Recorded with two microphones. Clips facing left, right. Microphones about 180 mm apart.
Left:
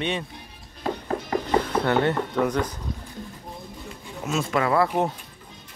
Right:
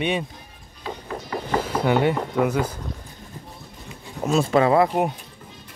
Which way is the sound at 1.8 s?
10° right (ahead or behind).